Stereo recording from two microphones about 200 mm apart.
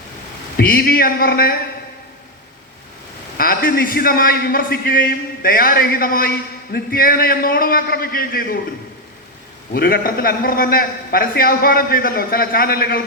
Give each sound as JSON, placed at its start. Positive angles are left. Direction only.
{"t": 0.5, "sound": "a man's voice", "side_deg": 50}
{"t": 3.3, "sound": "a man's voice", "side_deg": 45}
{"t": 9.7, "sound": "a man's voice", "side_deg": 50}